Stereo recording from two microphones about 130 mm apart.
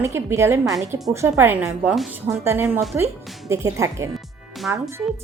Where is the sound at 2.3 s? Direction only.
20° right (ahead or behind).